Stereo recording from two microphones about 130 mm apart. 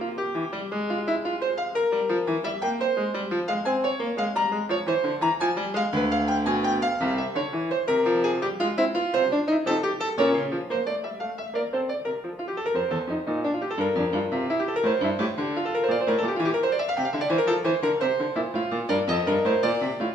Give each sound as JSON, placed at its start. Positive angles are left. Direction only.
{"t": 1.9, "sound": "music", "side_deg": -10}
{"t": 6.0, "sound": "music", "side_deg": -30}
{"t": 7.9, "sound": "music", "side_deg": -10}
{"t": 15.8, "sound": "music", "side_deg": -5}
{"t": 19.4, "sound": "music", "side_deg": -5}